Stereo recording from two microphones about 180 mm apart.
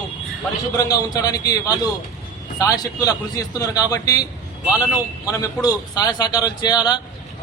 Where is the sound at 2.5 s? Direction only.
20° left (ahead or behind).